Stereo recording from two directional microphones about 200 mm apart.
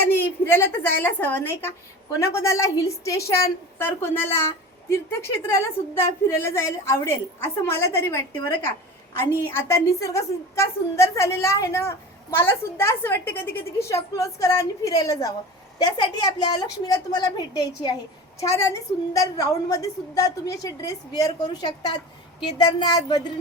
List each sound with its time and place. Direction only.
0.1 s a woman's voice: 10° left (ahead or behind)
5.5 s a woman's voice: 15° left (ahead or behind)